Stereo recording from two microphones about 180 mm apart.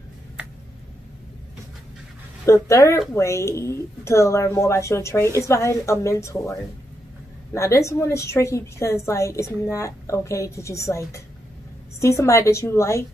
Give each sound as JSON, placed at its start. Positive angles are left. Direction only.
{"t": 2.4, "sound": "a woman's voice", "side_deg": 15}
{"t": 7.5, "sound": "a woman's voice", "side_deg": 15}